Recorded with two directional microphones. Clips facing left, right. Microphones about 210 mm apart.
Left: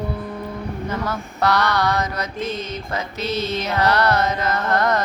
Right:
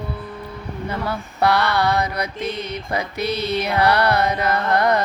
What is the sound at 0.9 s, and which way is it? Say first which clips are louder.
Speech: right 2 dB; 10° right (ahead or behind).